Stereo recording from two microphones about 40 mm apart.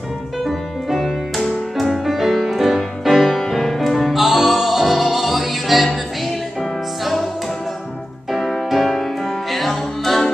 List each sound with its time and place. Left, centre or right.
0.5 s music: centre
8.3 s music: centre